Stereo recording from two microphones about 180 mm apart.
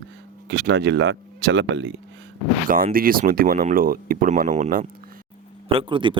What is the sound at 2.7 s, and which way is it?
Speech, 50° right (ahead or behind).